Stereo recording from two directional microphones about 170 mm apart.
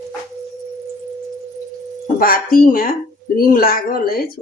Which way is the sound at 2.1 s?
60° left (ahead or behind).